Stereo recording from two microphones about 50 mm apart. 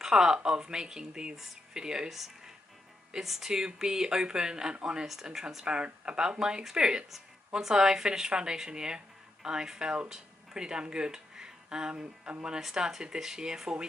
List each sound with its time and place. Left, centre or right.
0.0 s speech: centre
12.5 s speech: centre